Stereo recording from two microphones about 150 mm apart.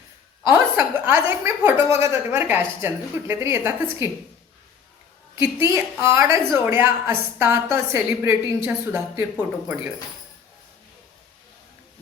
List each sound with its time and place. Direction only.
0.5 s a woman's voice: 15° right (ahead or behind)
5.4 s a woman's voice: 15° right (ahead or behind)